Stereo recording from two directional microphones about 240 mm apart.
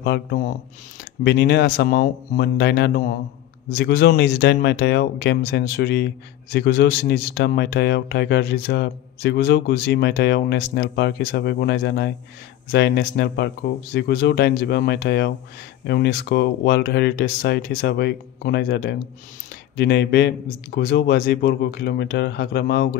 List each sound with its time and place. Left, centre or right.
0.0 s speech: left